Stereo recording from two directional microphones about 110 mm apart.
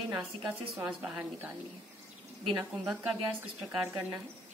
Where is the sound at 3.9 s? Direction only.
20° right (ahead or behind).